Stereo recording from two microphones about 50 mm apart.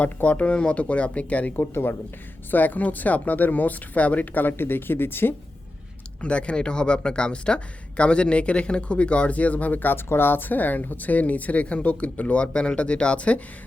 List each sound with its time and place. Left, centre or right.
0.0 s speech: left
1.5 s speech: left
2.5 s speech: left
6.2 s speech: left
9.9 s speech: left